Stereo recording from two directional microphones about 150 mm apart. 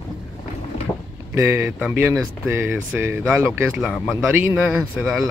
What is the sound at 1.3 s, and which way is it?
Speech, 15° right (ahead or behind).